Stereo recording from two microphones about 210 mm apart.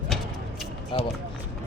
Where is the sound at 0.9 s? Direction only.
25° left (ahead or behind).